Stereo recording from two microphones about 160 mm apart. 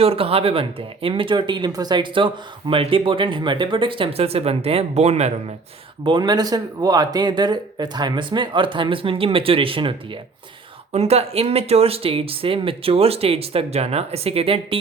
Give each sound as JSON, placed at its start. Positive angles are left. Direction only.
{"t": 0.0, "sound": "speech", "side_deg": -35}
{"t": 6.1, "sound": "speech", "side_deg": -25}
{"t": 10.9, "sound": "speech", "side_deg": -40}